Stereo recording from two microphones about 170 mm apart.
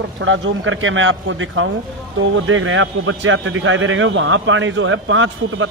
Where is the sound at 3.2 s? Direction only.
90° right.